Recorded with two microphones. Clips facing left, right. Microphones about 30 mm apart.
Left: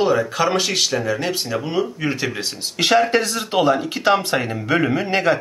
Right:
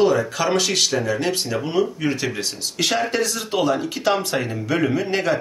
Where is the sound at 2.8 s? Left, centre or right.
Left.